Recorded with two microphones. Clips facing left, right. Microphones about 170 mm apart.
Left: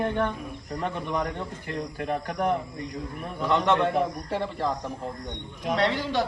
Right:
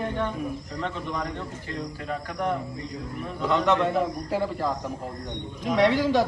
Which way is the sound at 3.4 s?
Centre (ahead or behind).